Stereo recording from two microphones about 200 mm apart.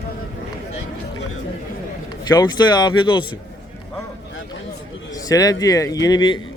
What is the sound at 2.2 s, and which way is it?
A man's voice, 20° left (ahead or behind).